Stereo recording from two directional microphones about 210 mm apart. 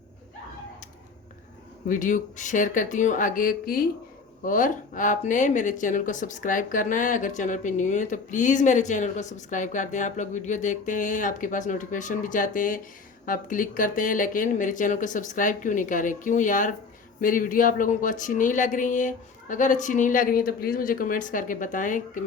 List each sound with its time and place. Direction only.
1.9 s speech: 40° left (ahead or behind)